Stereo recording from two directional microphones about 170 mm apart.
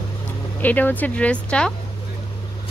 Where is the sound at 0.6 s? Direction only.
10° left (ahead or behind).